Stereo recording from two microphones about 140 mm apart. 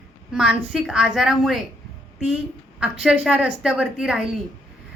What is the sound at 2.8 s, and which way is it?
A woman's voice, 5° right (ahead or behind).